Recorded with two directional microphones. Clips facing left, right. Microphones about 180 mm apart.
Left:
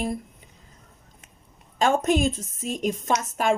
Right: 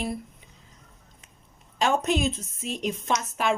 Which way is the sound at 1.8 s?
50° left (ahead or behind).